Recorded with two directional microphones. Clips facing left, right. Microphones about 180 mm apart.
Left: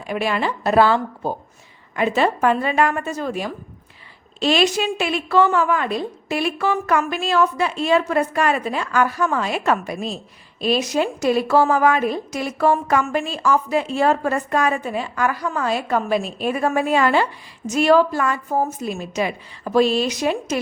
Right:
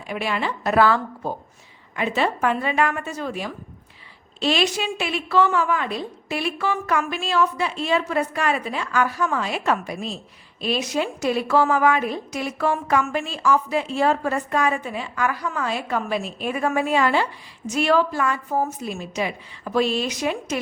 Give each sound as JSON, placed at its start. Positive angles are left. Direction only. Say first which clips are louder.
{"t": 0.1, "sound": "a woman's voice", "louder": "left 4 dB", "side_deg": 40}
{"t": 0.6, "sound": "a woman's voice", "louder": "left 2 dB", "side_deg": 30}
{"t": 2.0, "sound": "a woman's voice", "louder": "left 4 dB", "side_deg": 45}
{"t": 19.6, "sound": "a woman's voice", "louder": "left 4 dB", "side_deg": 40}